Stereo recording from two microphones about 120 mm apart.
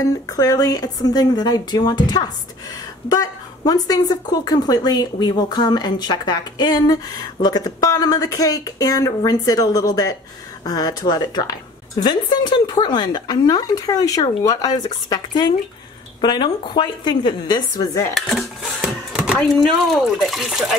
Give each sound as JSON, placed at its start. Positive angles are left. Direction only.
{"t": 0.0, "sound": "a woman's voice", "side_deg": 30}
{"t": 18.8, "sound": "a sound", "side_deg": -10}
{"t": 19.4, "sound": "speech", "side_deg": 0}